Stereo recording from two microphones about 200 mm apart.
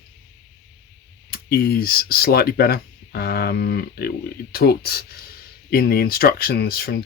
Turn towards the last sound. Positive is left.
turn(degrees=50)  # may be behind; listen again after turning